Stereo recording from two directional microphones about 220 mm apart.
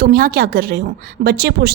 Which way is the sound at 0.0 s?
40° right (ahead or behind).